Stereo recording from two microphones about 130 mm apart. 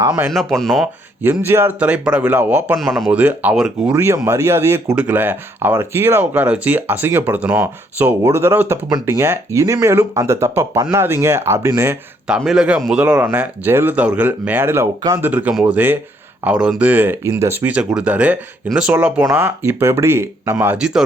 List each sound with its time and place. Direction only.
0.3 s speech: centre (ahead or behind)
1.2 s speech: 15° right (ahead or behind)
2.7 s speech: centre (ahead or behind)
3.9 s speech: 20° right (ahead or behind)
12.4 s speech: 5° right (ahead or behind); by 20.7 s 20° right (ahead or behind)
20.7 s speech: 5° right (ahead or behind)